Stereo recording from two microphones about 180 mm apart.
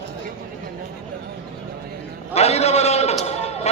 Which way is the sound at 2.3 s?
35° left (ahead or behind).